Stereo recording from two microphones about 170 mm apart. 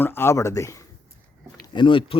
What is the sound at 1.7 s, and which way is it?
Speech, 30° left (ahead or behind).